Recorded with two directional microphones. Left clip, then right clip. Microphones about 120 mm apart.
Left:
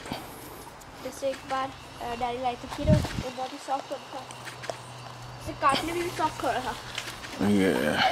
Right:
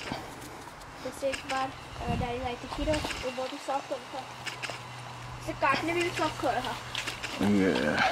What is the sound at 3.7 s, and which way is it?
Speech, 50° left (ahead or behind).